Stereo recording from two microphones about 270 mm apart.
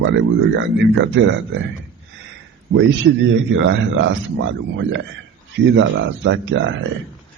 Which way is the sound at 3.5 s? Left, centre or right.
Right.